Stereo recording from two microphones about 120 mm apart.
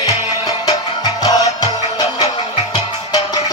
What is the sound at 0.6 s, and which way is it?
Music, 35° left (ahead or behind).